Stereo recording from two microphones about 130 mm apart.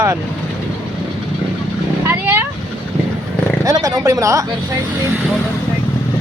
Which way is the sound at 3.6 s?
25° right (ahead or behind).